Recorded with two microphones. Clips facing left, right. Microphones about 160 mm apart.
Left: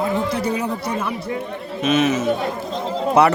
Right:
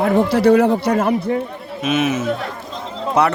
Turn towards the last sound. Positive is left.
turn(degrees=5)  # may be behind; listen again after turning